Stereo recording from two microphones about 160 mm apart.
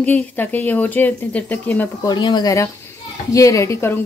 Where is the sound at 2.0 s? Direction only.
25° left (ahead or behind).